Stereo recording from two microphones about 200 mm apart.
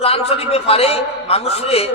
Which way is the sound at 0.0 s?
30° left (ahead or behind).